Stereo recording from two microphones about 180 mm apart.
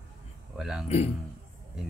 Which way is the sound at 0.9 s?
35° left (ahead or behind).